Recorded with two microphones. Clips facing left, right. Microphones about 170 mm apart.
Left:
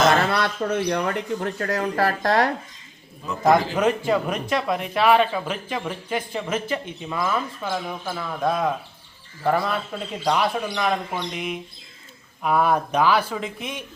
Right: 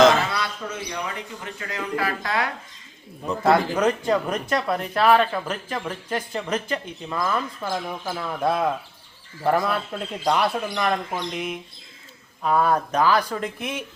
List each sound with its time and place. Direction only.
0.2 s speech: 60° left (ahead or behind)
3.4 s speech: 10° left (ahead or behind)
7.6 s speech: 5° right (ahead or behind)
12.4 s speech: 10° left (ahead or behind)